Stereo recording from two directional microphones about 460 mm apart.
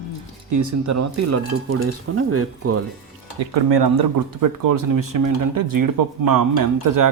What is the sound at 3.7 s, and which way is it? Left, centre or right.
Speech, right.